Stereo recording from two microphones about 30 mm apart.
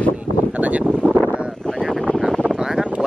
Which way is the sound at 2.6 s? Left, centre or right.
Right.